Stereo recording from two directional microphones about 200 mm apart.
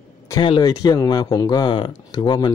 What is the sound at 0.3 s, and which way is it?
Speech, 20° left (ahead or behind).